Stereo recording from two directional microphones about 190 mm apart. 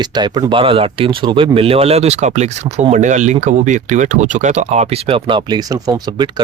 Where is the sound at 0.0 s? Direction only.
20° right (ahead or behind).